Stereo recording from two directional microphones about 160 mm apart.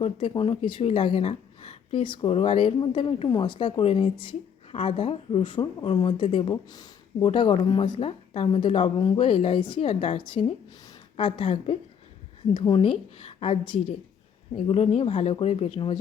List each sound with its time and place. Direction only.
0.0 s speech: 35° left (ahead or behind)